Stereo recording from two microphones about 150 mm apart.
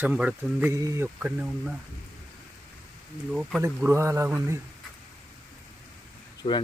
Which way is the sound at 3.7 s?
15° right (ahead or behind).